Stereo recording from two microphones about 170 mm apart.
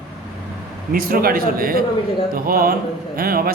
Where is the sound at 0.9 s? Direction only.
60° right (ahead or behind).